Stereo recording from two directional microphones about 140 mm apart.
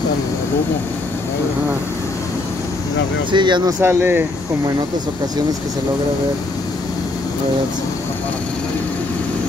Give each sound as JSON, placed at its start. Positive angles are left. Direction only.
{"t": 3.3, "sound": "speech", "side_deg": -35}
{"t": 3.8, "sound": "speech", "side_deg": -15}